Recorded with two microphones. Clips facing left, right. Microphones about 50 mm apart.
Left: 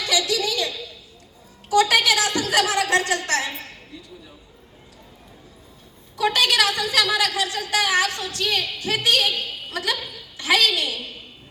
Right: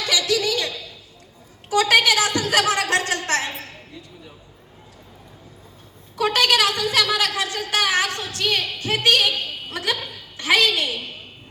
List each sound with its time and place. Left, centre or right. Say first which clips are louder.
0.0 s a sound: right 1 dB; right
1.7 s a woman's voice: right 1 dB; right
6.1 s a woman's voice: right 1 dB; right